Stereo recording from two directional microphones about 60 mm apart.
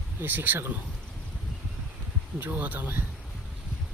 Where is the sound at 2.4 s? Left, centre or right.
Right.